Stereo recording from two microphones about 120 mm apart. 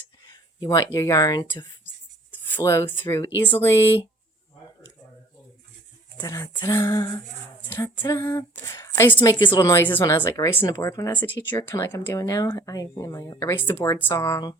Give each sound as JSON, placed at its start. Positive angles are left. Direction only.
{"t": 0.3, "sound": "a sound", "side_deg": 35}
{"t": 0.9, "sound": "speech", "side_deg": 25}
{"t": 2.3, "sound": "a sound", "side_deg": 20}
{"t": 3.1, "sound": "speech", "side_deg": 20}
{"t": 6.2, "sound": "speech", "side_deg": 25}
{"t": 9.2, "sound": "a woman's voice", "side_deg": 40}
{"t": 9.6, "sound": "speech", "side_deg": 20}
{"t": 11.2, "sound": "speech", "side_deg": 15}